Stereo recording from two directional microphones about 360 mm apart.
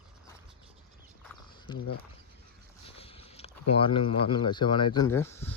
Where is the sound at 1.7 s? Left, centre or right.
Centre.